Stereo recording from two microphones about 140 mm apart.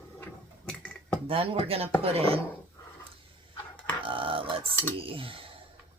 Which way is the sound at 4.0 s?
40° right (ahead or behind).